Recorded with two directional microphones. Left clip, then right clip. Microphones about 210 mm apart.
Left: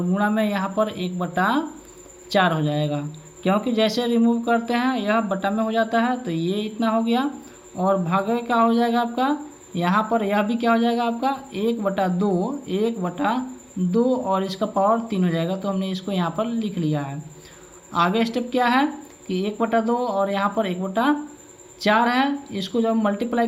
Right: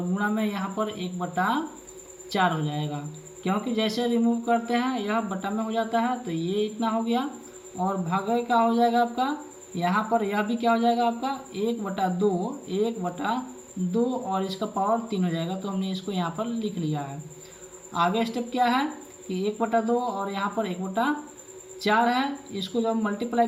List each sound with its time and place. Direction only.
0.1 s speech: 25° left (ahead or behind)